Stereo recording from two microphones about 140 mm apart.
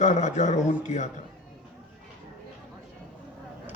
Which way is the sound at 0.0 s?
60° left (ahead or behind).